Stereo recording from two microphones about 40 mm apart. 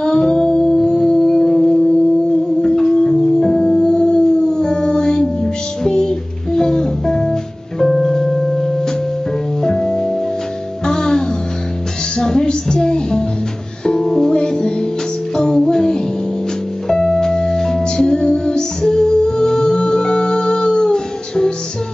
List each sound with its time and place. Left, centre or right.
0.0 s music: centre
7.8 s music: centre